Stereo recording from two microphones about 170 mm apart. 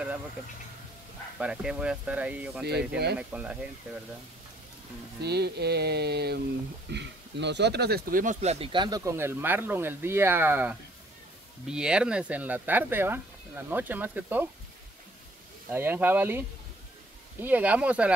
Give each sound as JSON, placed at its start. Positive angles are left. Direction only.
{"t": 1.4, "sound": "speech", "side_deg": -5}
{"t": 5.2, "sound": "speech", "side_deg": -75}
{"t": 6.9, "sound": "speech", "side_deg": -90}
{"t": 8.7, "sound": "speech", "side_deg": -25}
{"t": 15.7, "sound": "speech", "side_deg": -10}